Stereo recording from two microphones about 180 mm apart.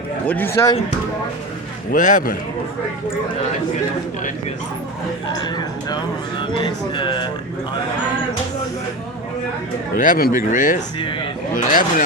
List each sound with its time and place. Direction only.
0.3 s speech: 10° left (ahead or behind)
1.9 s speech: 45° left (ahead or behind)
6.9 s speech: 25° left (ahead or behind)
9.9 s speech: 50° left (ahead or behind)